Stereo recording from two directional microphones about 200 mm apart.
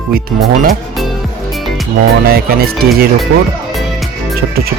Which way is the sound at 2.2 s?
50° right (ahead or behind).